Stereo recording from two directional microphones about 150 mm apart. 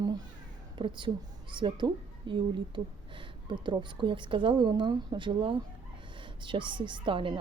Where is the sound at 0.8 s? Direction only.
30° right (ahead or behind).